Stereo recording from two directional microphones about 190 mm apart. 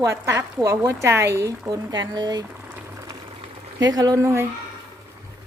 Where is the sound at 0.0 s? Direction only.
15° right (ahead or behind).